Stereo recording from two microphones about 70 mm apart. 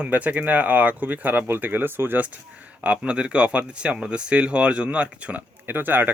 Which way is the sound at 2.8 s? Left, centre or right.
Centre.